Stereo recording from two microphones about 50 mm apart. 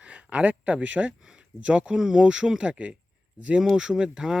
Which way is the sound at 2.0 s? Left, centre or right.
Centre.